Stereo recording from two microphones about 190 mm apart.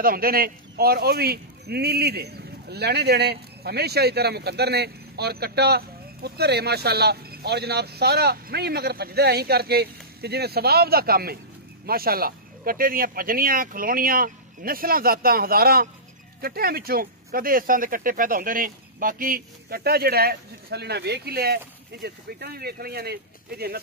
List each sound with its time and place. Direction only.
0.0 s speech: 50° right (ahead or behind)